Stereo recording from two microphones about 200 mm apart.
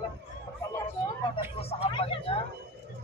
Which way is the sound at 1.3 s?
30° left (ahead or behind).